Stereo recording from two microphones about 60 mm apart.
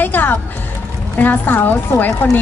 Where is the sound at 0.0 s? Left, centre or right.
Left.